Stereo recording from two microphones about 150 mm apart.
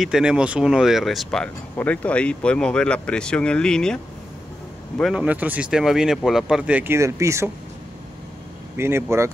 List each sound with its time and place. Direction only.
0.0 s speech: 5° right (ahead or behind)
8.7 s speech: 15° right (ahead or behind)